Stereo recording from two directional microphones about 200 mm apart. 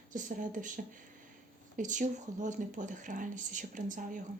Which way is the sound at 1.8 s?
40° right (ahead or behind).